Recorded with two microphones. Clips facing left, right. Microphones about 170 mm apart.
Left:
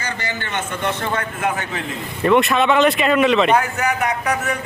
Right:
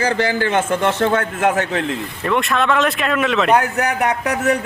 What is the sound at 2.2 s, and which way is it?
Speech, 5° left (ahead or behind).